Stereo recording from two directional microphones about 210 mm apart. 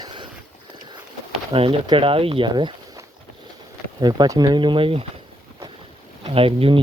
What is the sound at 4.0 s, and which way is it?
Speech, 20° right (ahead or behind).